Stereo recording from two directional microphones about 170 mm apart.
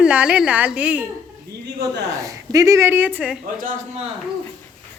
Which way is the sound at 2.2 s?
20° right (ahead or behind).